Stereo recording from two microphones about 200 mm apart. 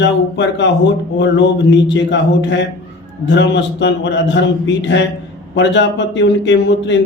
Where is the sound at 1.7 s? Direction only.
65° left (ahead or behind).